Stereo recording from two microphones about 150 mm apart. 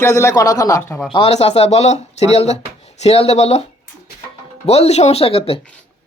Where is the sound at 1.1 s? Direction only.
40° left (ahead or behind).